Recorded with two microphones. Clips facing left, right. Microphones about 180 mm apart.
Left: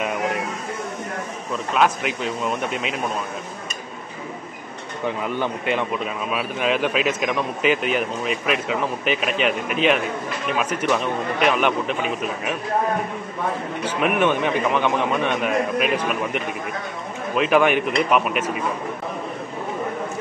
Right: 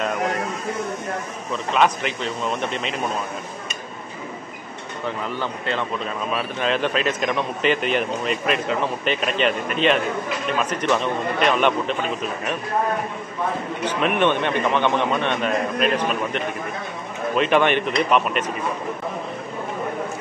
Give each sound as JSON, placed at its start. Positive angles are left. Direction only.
{"t": 1.8, "sound": "speech", "side_deg": 5}
{"t": 5.0, "sound": "a man's voice", "side_deg": 15}
{"t": 13.8, "sound": "a man's voice", "side_deg": 5}